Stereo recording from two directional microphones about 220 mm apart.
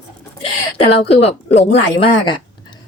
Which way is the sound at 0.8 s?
25° left (ahead or behind).